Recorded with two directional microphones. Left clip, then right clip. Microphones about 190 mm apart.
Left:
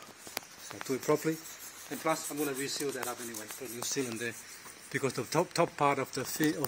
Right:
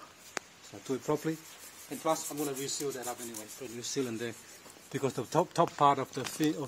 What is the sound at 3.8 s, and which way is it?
Speech, 30° right (ahead or behind).